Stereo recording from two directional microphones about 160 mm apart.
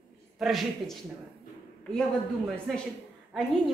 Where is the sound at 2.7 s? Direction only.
Centre (ahead or behind).